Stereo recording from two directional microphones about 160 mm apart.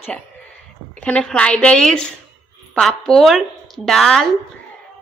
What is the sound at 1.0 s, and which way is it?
A woman's voice, 10° left (ahead or behind).